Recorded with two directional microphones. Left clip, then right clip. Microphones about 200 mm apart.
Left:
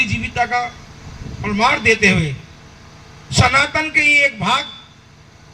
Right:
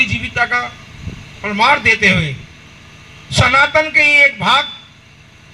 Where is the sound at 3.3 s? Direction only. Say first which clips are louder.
Right 4 dB; 40° right (ahead or behind).